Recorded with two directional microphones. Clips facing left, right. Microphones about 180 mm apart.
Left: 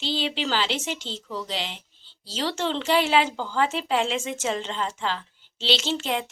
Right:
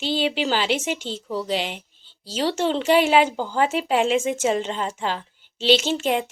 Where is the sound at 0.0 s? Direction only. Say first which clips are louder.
Right 5 dB; 15° right (ahead or behind).